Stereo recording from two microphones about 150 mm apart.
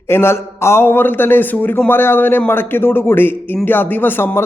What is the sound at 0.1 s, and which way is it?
A man's voice, 15° left (ahead or behind).